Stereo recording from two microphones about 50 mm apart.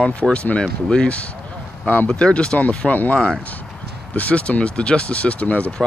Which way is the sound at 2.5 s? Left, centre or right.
Left.